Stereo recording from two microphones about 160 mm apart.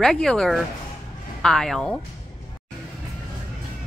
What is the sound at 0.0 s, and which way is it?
Speech, 5° left (ahead or behind).